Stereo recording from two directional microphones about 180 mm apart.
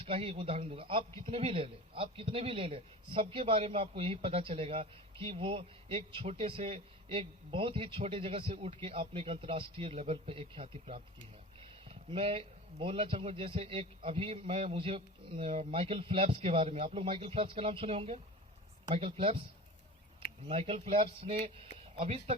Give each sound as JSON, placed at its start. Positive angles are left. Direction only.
{"t": 0.0, "sound": "a man's voice", "side_deg": -30}
{"t": 20.5, "sound": "a man's voice", "side_deg": -30}